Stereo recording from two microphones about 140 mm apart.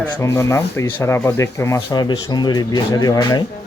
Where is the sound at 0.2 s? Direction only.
20° left (ahead or behind).